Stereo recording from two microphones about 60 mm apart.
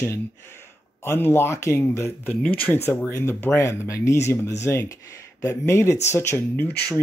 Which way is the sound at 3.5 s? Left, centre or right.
Left.